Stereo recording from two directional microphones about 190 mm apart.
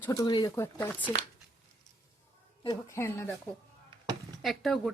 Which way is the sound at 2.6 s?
15° left (ahead or behind).